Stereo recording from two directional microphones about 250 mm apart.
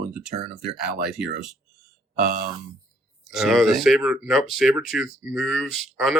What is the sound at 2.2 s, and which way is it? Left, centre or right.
Speech, right.